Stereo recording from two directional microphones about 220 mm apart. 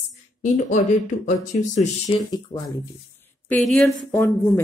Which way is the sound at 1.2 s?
35° left (ahead or behind).